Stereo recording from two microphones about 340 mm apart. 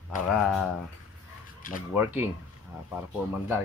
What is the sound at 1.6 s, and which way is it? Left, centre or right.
Speech, left.